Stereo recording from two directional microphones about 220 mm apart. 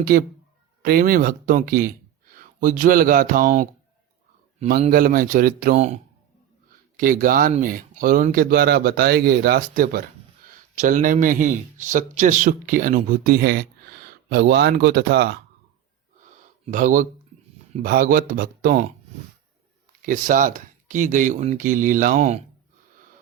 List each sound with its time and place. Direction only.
0.0 s speech: 40° right (ahead or behind)
4.7 s speech: 40° right (ahead or behind)
16.7 s speech: 35° right (ahead or behind)
20.0 s speech: 40° right (ahead or behind)